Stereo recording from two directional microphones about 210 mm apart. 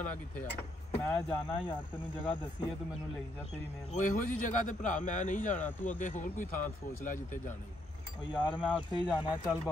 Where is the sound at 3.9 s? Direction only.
35° left (ahead or behind).